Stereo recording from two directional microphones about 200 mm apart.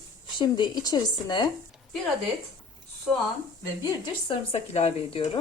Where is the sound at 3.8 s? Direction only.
30° left (ahead or behind).